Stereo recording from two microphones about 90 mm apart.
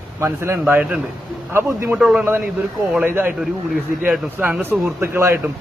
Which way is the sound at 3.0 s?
20° right (ahead or behind).